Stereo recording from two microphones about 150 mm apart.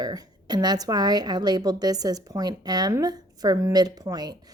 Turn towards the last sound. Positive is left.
turn(degrees=-25)  # may be behind; listen again after turning